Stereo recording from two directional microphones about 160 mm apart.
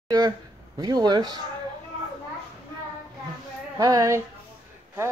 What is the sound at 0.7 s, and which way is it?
Speech, 25° right (ahead or behind).